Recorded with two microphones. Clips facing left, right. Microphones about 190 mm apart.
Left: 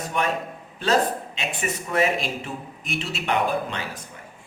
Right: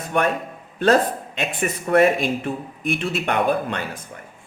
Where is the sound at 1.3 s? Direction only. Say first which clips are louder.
Right 4 dB; 55° right (ahead or behind).